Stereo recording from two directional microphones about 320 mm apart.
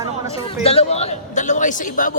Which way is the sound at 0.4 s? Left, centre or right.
Centre.